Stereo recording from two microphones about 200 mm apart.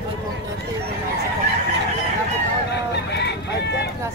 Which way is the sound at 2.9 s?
55° left (ahead or behind).